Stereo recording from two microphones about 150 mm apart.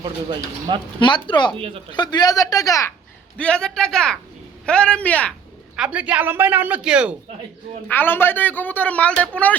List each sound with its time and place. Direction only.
0.9 s speech: 30° left (ahead or behind)
1.5 s speech: 35° right (ahead or behind)
1.9 s a woman's voice: 30° left (ahead or behind)
3.3 s a man's voice: 5° left (ahead or behind)
5.7 s speech: 5° right (ahead or behind)
7.9 s a man's voice: 15° left (ahead or behind)